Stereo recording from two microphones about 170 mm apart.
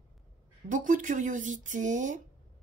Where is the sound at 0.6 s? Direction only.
50° right (ahead or behind).